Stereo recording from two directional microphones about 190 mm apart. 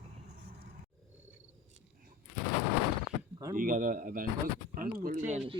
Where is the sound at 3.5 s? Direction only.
45° right (ahead or behind).